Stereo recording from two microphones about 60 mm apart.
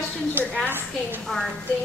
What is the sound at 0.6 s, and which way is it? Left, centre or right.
Speech, right.